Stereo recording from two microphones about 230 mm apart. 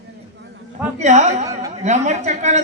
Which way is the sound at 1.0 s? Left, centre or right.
Right.